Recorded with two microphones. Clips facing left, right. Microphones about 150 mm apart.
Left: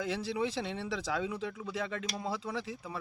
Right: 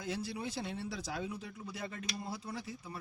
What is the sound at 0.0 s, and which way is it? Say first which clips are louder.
Speech: left 6 dB; 90° left.